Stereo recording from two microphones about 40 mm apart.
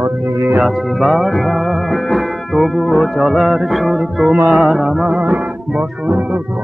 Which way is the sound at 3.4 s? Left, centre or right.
Centre.